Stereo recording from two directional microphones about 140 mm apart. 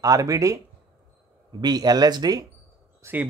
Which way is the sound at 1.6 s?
30° right (ahead or behind).